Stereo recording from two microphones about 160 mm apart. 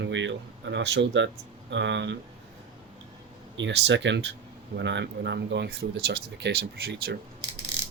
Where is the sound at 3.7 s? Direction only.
90° right.